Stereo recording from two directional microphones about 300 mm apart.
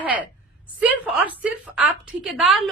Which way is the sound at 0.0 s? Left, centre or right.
Centre.